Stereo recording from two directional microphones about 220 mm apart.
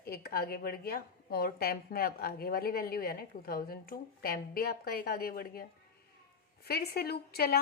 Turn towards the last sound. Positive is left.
turn(degrees=45)  # may be behind; listen again after turning